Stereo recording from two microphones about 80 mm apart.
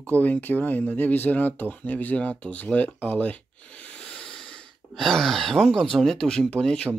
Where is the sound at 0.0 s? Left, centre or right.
Centre.